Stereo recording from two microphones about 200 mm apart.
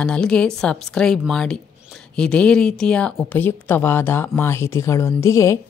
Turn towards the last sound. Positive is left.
turn(degrees=15)  # may be behind; listen again after turning